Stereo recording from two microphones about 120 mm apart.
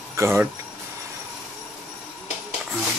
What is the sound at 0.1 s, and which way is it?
Speech, 20° right (ahead or behind).